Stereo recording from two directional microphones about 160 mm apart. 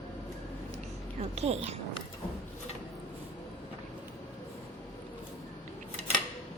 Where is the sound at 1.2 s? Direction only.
40° right (ahead or behind).